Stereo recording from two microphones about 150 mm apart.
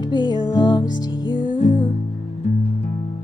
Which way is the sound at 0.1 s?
30° left (ahead or behind).